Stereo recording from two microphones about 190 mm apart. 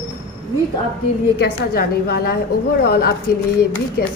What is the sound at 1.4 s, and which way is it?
A woman's voice, 55° left (ahead or behind).